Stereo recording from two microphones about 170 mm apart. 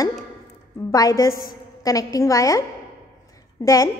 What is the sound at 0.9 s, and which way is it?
A woman's voice, 20° left (ahead or behind).